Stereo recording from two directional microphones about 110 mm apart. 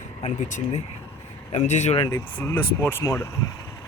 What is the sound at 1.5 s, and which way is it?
Speech, 90° left.